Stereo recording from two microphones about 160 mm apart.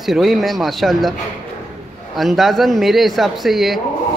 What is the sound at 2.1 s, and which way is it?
A man's voice, centre (ahead or behind).